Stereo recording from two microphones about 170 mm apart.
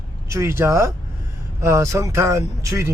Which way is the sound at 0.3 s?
15° right (ahead or behind).